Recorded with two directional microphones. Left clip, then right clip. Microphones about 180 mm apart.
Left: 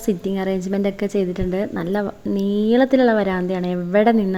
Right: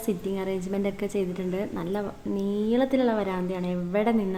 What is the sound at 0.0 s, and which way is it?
A woman's voice, 35° left (ahead or behind).